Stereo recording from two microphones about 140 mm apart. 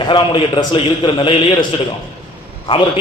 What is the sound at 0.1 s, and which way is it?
A man's voice, 35° left (ahead or behind).